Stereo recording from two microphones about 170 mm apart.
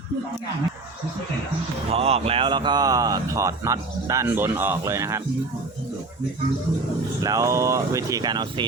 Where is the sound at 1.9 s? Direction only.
35° right (ahead or behind); by 5.2 s 15° right (ahead or behind).